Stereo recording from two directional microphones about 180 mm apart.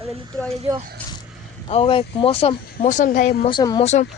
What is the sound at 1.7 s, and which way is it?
Speech, 30° left (ahead or behind).